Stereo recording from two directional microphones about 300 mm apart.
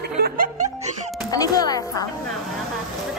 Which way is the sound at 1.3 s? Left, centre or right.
Centre.